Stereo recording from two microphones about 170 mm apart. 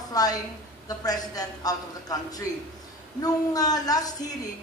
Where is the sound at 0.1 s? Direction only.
20° left (ahead or behind).